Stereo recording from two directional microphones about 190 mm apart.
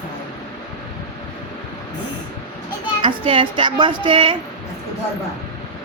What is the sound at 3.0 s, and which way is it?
Speech, 25° right (ahead or behind).